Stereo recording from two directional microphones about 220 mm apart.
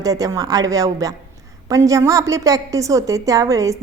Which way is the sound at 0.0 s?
15° right (ahead or behind).